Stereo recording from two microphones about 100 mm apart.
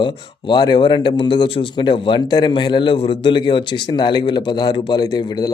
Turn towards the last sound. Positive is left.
turn(degrees=40)  # may be behind; listen again after turning